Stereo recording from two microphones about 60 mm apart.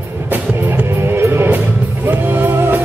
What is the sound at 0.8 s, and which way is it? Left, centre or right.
Music, right.